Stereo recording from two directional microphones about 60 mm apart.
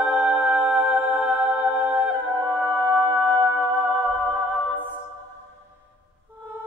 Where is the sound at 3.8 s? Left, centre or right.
Left.